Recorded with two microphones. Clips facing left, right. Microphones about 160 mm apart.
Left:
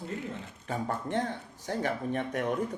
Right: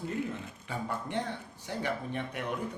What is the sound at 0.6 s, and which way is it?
A man's voice, 45° left (ahead or behind).